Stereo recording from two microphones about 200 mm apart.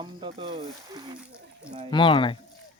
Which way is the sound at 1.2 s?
5° right (ahead or behind).